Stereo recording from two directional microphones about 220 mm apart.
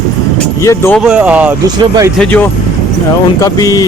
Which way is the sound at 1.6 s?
15° right (ahead or behind).